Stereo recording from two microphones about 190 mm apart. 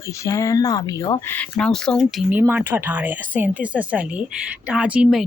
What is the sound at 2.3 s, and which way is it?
Speech, 10° right (ahead or behind).